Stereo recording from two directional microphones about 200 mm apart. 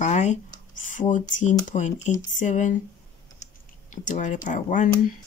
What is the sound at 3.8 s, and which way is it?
Speech, 40° left (ahead or behind).